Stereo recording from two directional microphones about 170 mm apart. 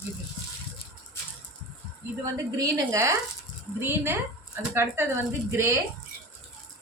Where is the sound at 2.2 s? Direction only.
20° right (ahead or behind).